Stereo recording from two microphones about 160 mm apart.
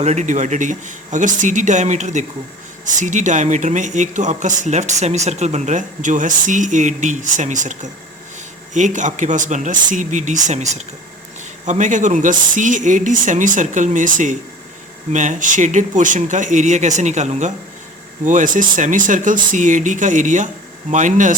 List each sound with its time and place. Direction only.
0.0 s speech: 45° right (ahead or behind)